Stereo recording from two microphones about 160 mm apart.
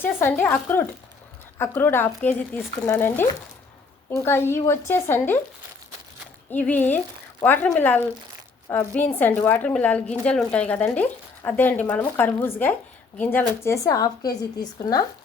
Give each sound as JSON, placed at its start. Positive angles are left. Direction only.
{"t": 0.0, "sound": "a woman's voice", "side_deg": 15}
{"t": 6.5, "sound": "a woman's voice", "side_deg": 10}